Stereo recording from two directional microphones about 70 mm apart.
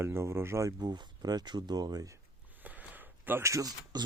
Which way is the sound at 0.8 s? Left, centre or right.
Right.